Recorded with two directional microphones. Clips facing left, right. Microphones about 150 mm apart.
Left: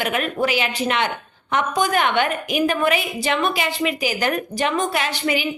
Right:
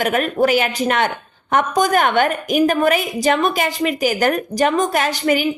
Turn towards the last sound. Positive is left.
turn(degrees=-45)  # may be behind; listen again after turning